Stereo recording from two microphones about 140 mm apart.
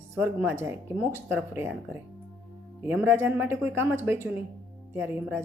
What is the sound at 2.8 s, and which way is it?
Speech, 10° right (ahead or behind).